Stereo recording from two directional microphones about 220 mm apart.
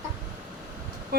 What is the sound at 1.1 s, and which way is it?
Speech, 45° right (ahead or behind).